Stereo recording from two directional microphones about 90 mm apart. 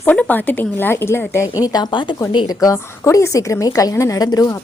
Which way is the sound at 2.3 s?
45° left (ahead or behind).